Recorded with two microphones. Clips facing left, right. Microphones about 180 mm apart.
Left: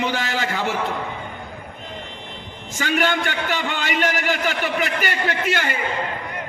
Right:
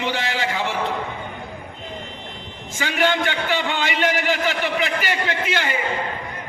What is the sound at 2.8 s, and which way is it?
A man's voice, 45° left (ahead or behind).